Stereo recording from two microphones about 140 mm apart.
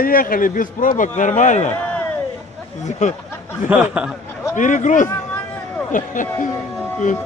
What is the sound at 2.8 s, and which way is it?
Speech, 55° left (ahead or behind).